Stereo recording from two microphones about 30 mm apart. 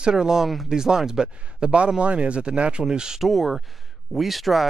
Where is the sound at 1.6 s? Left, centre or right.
Right.